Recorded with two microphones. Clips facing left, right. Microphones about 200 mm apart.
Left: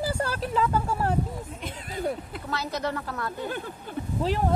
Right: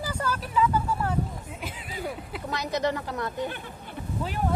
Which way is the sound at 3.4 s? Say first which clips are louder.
Left 1 dB; 45° left (ahead or behind).